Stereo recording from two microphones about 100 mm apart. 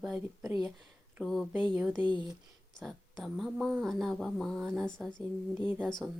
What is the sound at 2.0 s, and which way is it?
Speech, 50° left (ahead or behind).